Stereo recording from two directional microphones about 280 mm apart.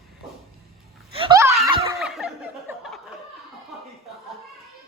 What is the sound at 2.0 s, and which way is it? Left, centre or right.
Snicker, centre.